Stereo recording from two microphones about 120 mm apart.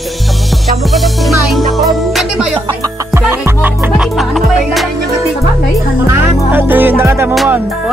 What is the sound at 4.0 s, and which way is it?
Music, centre (ahead or behind).